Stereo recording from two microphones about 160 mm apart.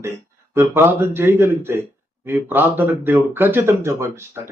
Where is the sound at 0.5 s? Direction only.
15° right (ahead or behind).